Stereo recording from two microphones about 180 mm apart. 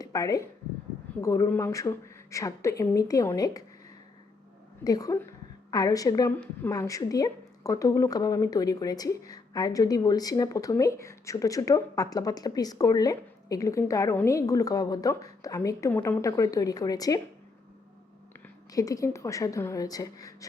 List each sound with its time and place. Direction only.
0.0 s a woman's voice: 20° left (ahead or behind)
4.8 s a woman's voice: 20° left (ahead or behind)
18.7 s a woman's voice: 20° left (ahead or behind)